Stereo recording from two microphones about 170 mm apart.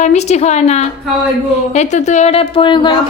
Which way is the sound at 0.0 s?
40° left (ahead or behind).